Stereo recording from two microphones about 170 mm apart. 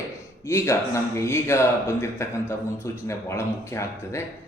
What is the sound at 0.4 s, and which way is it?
Speech, 15° left (ahead or behind).